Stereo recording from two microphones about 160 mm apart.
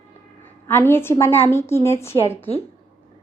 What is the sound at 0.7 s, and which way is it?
Speech, 15° left (ahead or behind).